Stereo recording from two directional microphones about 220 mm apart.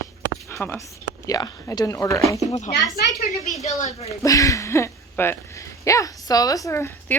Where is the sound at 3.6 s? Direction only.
30° left (ahead or behind).